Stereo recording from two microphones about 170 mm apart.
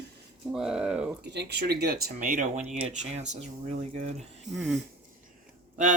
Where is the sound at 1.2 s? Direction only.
80° right; by 4.1 s 40° right (ahead or behind).